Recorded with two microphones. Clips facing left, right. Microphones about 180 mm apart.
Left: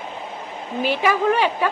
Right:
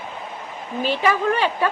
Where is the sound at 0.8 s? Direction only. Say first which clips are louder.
Left 1 dB; 10° left (ahead or behind).